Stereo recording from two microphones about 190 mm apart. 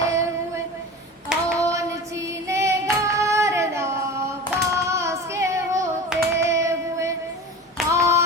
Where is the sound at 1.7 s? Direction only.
15° right (ahead or behind).